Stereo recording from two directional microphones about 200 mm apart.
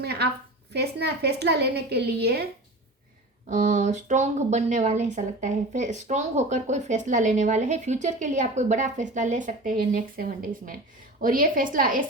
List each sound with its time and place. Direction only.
0.0 s a sound: 55° right (ahead or behind)
0.7 s a woman's voice: 55° right (ahead or behind)
3.5 s a woman's voice: 40° right (ahead or behind)